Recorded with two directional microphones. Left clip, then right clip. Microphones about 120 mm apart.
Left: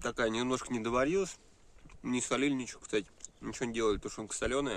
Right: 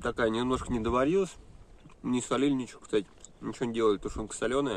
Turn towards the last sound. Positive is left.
turn(degrees=20)  # may be behind; listen again after turning